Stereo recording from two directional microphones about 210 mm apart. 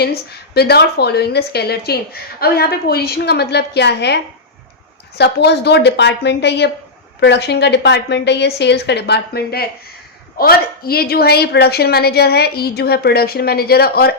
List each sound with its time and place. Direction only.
0.0 s a woman's voice: 50° left (ahead or behind)